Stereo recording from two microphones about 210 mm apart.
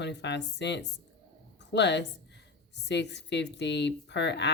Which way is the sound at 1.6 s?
55° left (ahead or behind).